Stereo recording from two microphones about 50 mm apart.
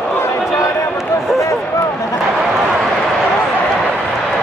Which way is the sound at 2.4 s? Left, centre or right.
Centre.